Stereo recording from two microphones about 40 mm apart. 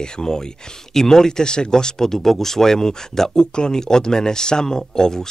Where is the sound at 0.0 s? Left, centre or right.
Centre.